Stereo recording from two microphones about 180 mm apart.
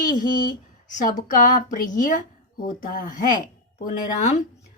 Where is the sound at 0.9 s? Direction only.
50° left (ahead or behind).